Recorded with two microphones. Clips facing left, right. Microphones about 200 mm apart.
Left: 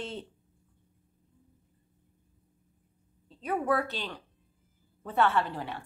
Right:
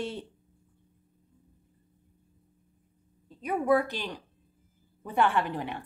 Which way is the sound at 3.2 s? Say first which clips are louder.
Right 2 dB; 10° right (ahead or behind).